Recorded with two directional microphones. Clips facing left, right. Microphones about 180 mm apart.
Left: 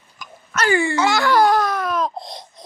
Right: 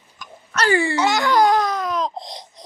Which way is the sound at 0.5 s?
35° right (ahead or behind).